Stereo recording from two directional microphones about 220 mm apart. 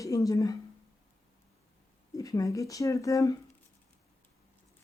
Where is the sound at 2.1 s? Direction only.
15° left (ahead or behind).